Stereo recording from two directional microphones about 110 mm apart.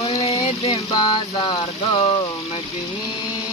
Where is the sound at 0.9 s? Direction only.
45° left (ahead or behind).